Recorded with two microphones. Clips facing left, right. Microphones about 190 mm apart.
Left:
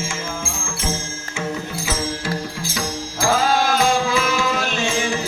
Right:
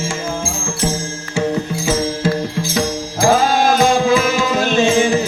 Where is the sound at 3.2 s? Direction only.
20° right (ahead or behind).